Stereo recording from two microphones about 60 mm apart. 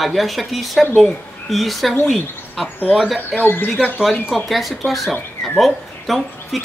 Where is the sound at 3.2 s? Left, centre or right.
Left.